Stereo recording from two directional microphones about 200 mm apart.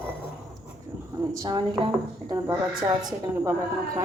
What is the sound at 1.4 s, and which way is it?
Speech, 20° right (ahead or behind).